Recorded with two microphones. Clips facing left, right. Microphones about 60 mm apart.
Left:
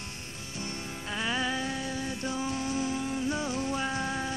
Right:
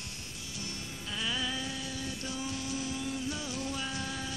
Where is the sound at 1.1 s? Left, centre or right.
Left.